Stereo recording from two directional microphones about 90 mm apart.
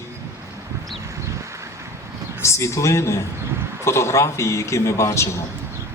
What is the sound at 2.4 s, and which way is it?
A man's voice, 35° left (ahead or behind).